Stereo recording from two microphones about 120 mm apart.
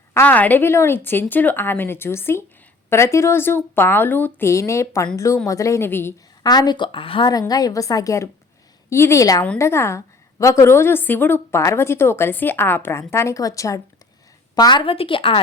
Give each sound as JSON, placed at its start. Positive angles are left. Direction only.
{"t": 0.1, "sound": "a woman's voice", "side_deg": 15}
{"t": 6.4, "sound": "a woman's voice", "side_deg": 35}
{"t": 7.3, "sound": "a woman's voice", "side_deg": 35}